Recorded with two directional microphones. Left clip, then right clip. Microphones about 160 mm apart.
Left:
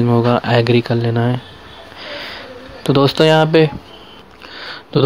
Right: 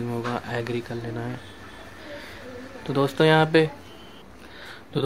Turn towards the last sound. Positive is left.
turn(degrees=30)  # may be behind; listen again after turning